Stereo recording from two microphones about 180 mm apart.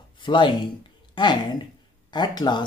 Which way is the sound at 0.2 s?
25° left (ahead or behind).